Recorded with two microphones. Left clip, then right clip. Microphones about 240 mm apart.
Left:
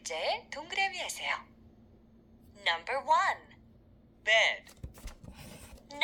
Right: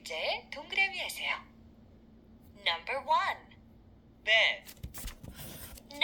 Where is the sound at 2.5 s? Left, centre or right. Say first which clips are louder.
Left 1 dB; left.